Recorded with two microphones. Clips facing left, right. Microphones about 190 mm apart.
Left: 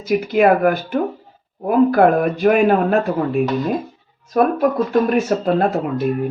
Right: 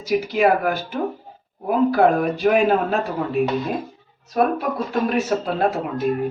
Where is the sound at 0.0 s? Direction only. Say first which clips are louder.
Left 3 dB; 55° left (ahead or behind).